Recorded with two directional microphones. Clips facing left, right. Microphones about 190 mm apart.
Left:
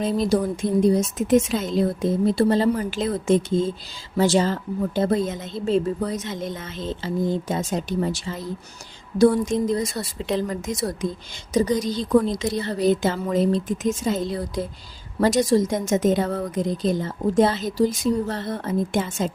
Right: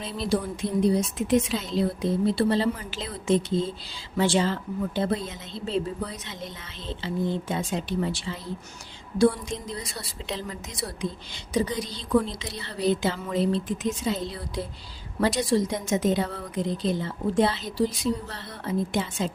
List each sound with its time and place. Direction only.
0.0 s a woman's voice: 45° left (ahead or behind)